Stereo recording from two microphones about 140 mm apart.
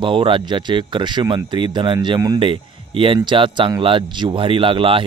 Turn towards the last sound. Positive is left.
turn(degrees=-40)  # may be behind; listen again after turning